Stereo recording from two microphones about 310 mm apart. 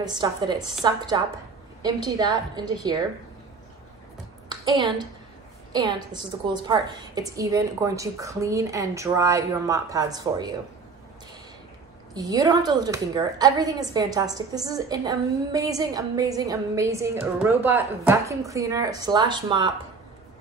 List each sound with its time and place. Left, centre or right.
0.0 s a woman's voice: centre
4.5 s a woman's voice: centre
12.1 s a woman's voice: centre